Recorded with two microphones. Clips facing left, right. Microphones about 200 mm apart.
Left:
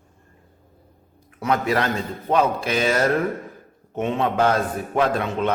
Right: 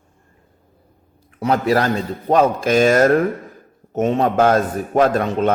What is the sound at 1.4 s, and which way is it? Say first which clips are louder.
A man's voice: right 4 dB; 35° right (ahead or behind).